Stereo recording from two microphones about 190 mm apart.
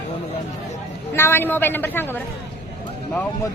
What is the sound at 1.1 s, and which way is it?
A woman's voice, 10° left (ahead or behind).